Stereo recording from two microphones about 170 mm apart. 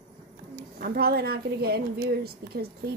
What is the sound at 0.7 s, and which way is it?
Speech, 65° right (ahead or behind).